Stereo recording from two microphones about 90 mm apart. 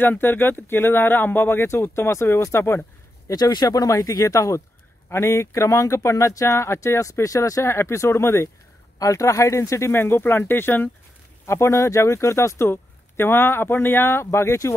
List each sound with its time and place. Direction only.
0.0 s speech: 25° left (ahead or behind)
3.3 s speech: 50° left (ahead or behind); by 14.7 s 30° left (ahead or behind)